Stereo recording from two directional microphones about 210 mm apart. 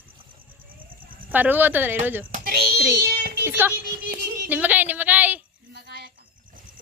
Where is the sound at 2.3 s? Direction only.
45° right (ahead or behind).